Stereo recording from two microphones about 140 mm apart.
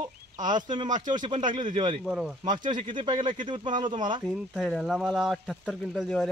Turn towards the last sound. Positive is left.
turn(degrees=0)  # may be behind; listen again after turning